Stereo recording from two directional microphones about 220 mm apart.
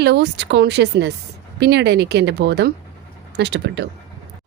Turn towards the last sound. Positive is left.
turn(degrees=-50)  # may be behind; listen again after turning